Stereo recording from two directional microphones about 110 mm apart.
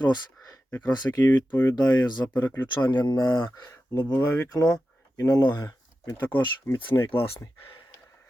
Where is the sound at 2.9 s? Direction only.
40° left (ahead or behind).